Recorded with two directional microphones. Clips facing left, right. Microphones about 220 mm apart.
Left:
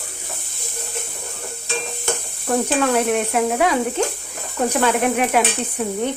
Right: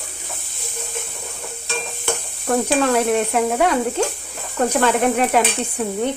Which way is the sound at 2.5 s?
Centre (ahead or behind).